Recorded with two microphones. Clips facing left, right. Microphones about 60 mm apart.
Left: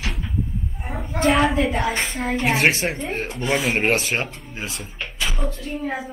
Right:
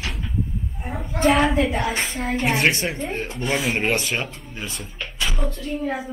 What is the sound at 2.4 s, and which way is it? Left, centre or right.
Speech, centre.